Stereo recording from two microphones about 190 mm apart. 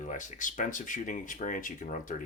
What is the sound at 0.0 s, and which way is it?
Speech, 40° left (ahead or behind).